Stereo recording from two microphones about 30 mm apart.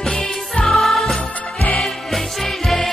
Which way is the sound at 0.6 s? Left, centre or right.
Centre.